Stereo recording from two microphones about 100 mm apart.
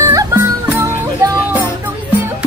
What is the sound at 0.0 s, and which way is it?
Music, 30° right (ahead or behind).